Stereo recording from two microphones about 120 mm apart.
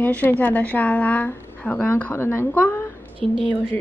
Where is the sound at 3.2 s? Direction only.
5° left (ahead or behind).